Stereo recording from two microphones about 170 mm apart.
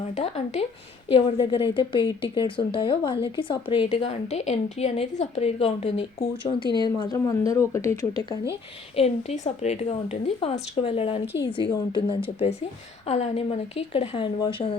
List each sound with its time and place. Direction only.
0.2 s a woman's voice: 40° left (ahead or behind); by 7.9 s 15° left (ahead or behind)
9.0 s a woman's voice: 45° left (ahead or behind)